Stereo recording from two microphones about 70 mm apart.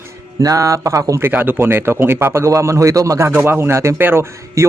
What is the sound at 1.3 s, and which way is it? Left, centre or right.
A man's voice, right.